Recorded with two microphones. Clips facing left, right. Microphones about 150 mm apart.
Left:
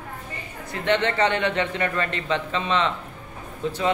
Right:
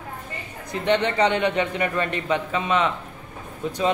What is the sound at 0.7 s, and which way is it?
A man's voice, 15° right (ahead or behind).